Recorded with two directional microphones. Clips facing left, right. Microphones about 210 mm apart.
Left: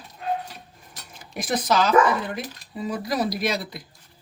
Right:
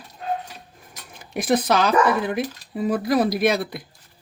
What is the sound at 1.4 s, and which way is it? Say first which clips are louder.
Speech: right 3 dB; 60° right (ahead or behind).